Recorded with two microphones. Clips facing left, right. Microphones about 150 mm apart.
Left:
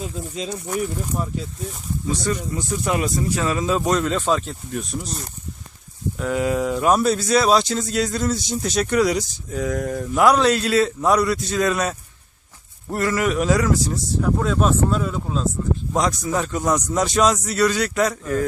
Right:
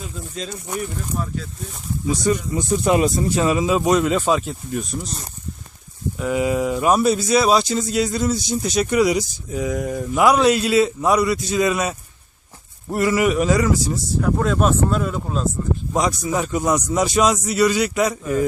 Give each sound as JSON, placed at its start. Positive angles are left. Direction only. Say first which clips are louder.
{"t": 2.0, "sound": "speech", "louder": "right 4 dB", "side_deg": -15}
{"t": 3.4, "sound": "speech", "louder": "right 4 dB", "side_deg": -10}
{"t": 6.1, "sound": "speech", "louder": "right 1 dB", "side_deg": -5}